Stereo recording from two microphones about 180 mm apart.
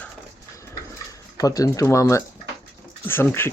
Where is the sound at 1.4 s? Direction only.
20° left (ahead or behind).